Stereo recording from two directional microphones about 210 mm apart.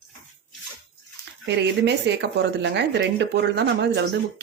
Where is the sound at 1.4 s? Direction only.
55° right (ahead or behind).